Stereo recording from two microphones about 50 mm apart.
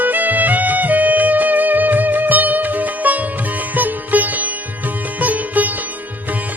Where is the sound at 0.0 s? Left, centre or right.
Right.